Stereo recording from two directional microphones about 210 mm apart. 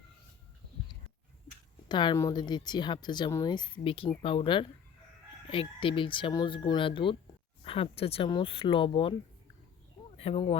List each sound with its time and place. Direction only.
1.9 s speech: 20° left (ahead or behind)
10.2 s speech: 25° left (ahead or behind)